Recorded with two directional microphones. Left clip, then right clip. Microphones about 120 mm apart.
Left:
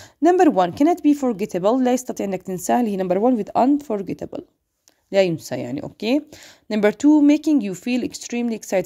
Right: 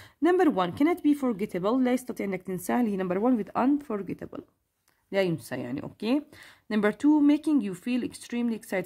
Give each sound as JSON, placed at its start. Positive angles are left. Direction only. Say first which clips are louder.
{"t": 0.0, "sound": "speech", "louder": "left 8 dB", "side_deg": 25}